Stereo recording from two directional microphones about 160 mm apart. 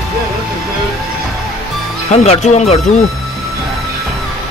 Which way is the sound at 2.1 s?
45° left (ahead or behind).